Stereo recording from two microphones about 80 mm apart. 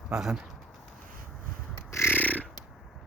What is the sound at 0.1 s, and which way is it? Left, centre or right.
Speech, centre.